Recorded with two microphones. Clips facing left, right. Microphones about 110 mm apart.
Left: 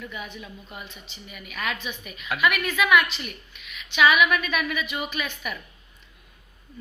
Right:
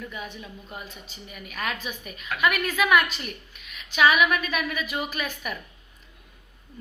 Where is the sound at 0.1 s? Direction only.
35° right (ahead or behind).